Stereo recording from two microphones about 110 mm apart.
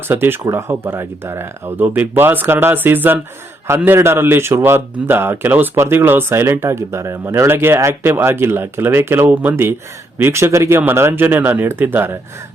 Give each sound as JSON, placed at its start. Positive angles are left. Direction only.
{"t": 0.1, "sound": "a man's voice", "side_deg": -20}